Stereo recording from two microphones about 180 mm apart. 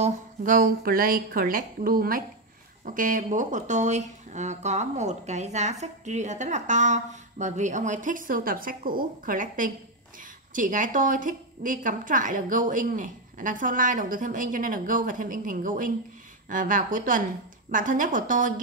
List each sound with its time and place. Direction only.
0.0 s speech: 50° right (ahead or behind)